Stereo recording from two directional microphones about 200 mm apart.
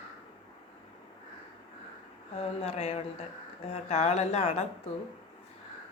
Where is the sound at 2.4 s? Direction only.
30° left (ahead or behind).